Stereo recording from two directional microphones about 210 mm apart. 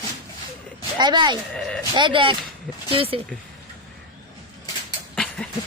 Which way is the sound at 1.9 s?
25° right (ahead or behind).